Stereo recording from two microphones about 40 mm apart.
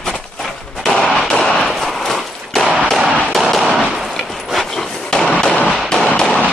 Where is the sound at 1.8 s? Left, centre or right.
Centre.